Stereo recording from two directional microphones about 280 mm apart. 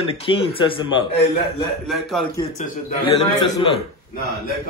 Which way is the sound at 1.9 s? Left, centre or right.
Centre.